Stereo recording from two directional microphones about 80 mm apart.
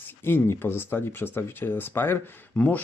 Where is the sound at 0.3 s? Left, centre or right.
Left.